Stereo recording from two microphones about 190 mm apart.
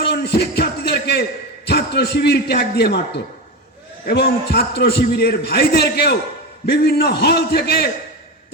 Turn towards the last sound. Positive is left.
turn(degrees=60)  # may be behind; listen again after turning